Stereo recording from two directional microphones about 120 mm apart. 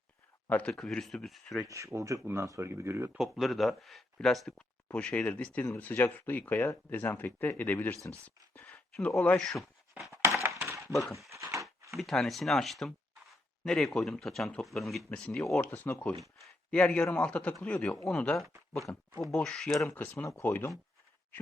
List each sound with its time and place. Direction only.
0.4 s speech: 10° left (ahead or behind)
1.6 s speech: 25° right (ahead or behind)
3.2 s speech: centre (ahead or behind)
10.1 s a sound: 20° right (ahead or behind)
10.9 s speech: centre (ahead or behind)
11.3 s horse: 25° right (ahead or behind)
11.9 s speech: 5° left (ahead or behind)
19.9 s speech: 15° left (ahead or behind)